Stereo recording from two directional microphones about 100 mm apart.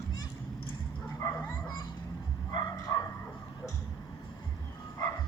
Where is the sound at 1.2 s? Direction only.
35° left (ahead or behind).